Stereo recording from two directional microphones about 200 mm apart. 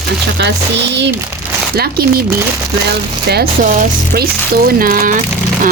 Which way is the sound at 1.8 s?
50° right (ahead or behind).